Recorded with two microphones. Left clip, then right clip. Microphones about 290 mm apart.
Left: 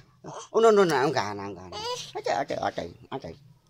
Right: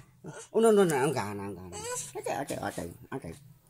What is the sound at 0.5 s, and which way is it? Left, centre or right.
Speech, left.